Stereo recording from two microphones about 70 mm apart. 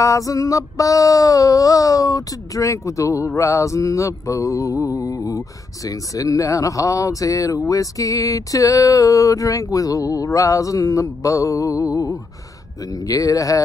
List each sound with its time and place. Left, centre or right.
0.0 s speech: left